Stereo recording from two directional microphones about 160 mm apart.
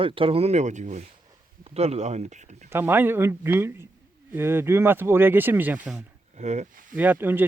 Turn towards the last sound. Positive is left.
turn(degrees=-10)  # may be behind; listen again after turning